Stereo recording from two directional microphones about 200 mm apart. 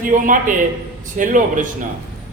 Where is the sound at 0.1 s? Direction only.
35° right (ahead or behind).